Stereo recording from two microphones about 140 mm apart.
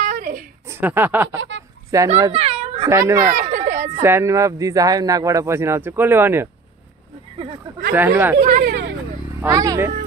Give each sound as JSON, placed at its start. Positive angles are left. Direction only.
{"t": 0.0, "sound": "a sound", "side_deg": -70}
{"t": 0.7, "sound": "speech", "side_deg": -15}
{"t": 2.3, "sound": "a sound", "side_deg": -45}
{"t": 2.9, "sound": "speech", "side_deg": -20}
{"t": 3.3, "sound": "a sound", "side_deg": -60}
{"t": 4.0, "sound": "speech", "side_deg": -20}
{"t": 7.9, "sound": "speech", "side_deg": -15}
{"t": 8.4, "sound": "speech", "side_deg": -80}
{"t": 9.5, "sound": "speech", "side_deg": -25}